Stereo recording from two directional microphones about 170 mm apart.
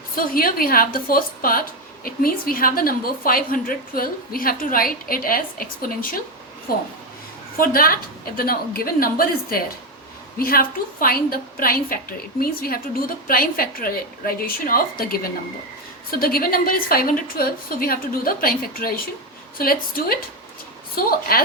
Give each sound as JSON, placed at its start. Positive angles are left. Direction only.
{"t": 0.2, "sound": "a woman's voice", "side_deg": 60}